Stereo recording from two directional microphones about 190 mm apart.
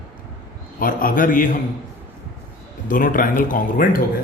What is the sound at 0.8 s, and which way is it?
Speech, 50° left (ahead or behind).